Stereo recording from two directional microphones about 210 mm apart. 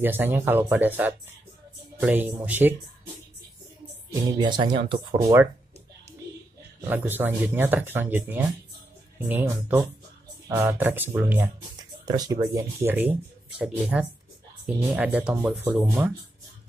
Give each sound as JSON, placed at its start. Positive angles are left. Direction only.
{"t": 0.0, "sound": "speech", "side_deg": -10}
{"t": 4.1, "sound": "speech", "side_deg": -20}
{"t": 6.9, "sound": "speech", "side_deg": -10}